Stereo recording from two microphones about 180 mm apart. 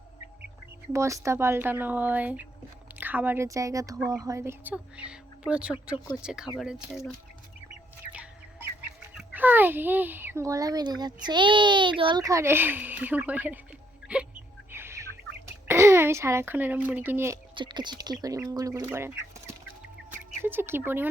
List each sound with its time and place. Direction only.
0.9 s a child's voice: 15° right (ahead or behind)
9.1 s a child's voice: 10° right (ahead or behind)
14.1 s hiccup: 5° right (ahead or behind)
14.7 s bird: 15° right (ahead or behind)
15.6 s speech: 15° right (ahead or behind)
17.5 s a child's voice: 25° right (ahead or behind)